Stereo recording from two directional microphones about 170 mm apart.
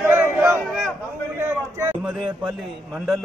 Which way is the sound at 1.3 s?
10° right (ahead or behind).